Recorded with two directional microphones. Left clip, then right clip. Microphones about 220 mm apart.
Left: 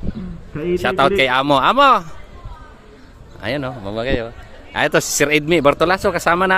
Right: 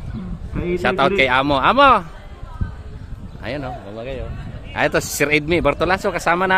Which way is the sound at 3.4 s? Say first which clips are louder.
Left 5 dB; 15° left (ahead or behind).